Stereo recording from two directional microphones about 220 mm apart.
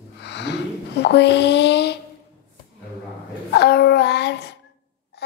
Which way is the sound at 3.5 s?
45° left (ahead or behind).